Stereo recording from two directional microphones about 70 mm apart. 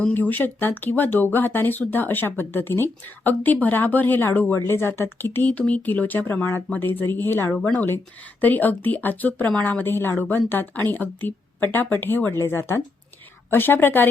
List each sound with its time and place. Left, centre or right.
0.0 s speech: left
4.6 s speech: left